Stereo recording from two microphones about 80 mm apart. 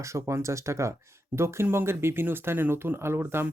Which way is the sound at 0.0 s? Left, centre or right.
Right.